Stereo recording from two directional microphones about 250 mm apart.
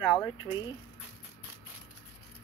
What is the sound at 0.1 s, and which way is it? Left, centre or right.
Speech, centre.